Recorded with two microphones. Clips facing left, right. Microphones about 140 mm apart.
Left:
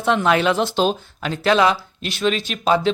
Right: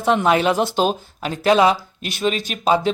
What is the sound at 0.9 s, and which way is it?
Speech, 45° right (ahead or behind).